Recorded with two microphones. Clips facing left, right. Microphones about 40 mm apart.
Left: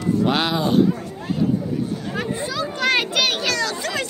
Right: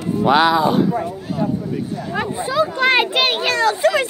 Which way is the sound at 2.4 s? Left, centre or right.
Right.